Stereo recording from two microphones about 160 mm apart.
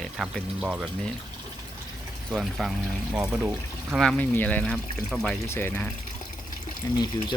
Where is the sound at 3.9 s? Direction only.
5° left (ahead or behind).